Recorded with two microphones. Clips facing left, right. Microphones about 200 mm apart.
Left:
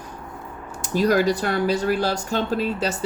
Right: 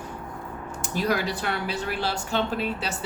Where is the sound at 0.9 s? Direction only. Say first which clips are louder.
Left 7 dB; 40° left (ahead or behind).